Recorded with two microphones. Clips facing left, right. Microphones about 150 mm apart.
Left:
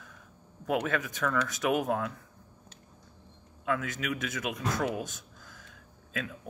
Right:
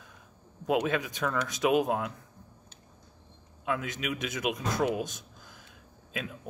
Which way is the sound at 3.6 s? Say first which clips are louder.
Left 1 dB; 20° right (ahead or behind).